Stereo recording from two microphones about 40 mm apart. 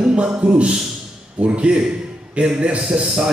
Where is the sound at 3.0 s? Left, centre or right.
Centre.